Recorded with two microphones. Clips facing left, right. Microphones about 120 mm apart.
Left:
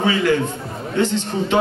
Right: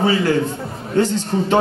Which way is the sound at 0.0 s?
35° right (ahead or behind).